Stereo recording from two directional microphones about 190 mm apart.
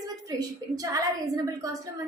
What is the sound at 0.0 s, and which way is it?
A woman's voice, 20° right (ahead or behind).